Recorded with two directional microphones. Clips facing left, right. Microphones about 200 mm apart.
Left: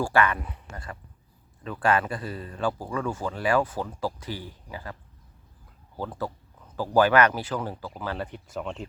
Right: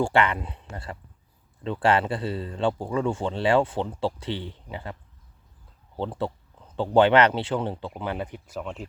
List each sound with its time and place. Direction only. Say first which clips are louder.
0.0 s a man's voice: right 1 dB; 25° right (ahead or behind)
6.0 s a man's voice: right 3 dB; 25° right (ahead or behind)
8.5 s speech: left 1 dB; centre (ahead or behind)